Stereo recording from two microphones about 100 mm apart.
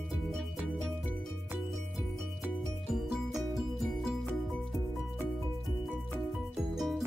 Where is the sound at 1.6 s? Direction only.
Centre (ahead or behind).